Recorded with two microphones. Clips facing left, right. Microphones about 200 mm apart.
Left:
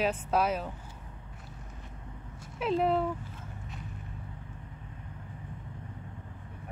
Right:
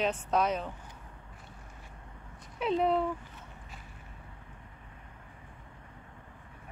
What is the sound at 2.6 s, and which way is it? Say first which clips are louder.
Speech: even; centre (ahead or behind).